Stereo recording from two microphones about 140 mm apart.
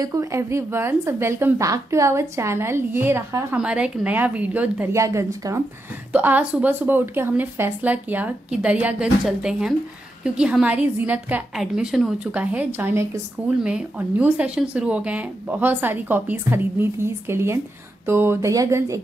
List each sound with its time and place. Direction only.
0.0 s a woman's voice: 25° right (ahead or behind)
5.0 s a woman's voice: 25° right (ahead or behind)
6.1 s a woman's voice: 10° right (ahead or behind)